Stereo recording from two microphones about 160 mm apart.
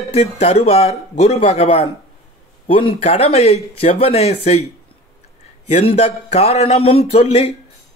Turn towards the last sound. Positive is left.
turn(degrees=40)  # may be behind; listen again after turning